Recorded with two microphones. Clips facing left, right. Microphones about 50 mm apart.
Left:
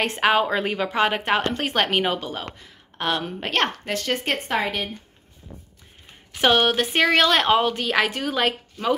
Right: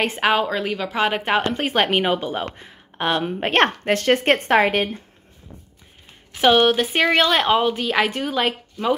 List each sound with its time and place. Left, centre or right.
0.0 s a woman's voice: centre
0.8 s speech: centre
2.4 s speech: right
3.0 s speech: centre
3.3 s speech: right
6.3 s a woman's voice: centre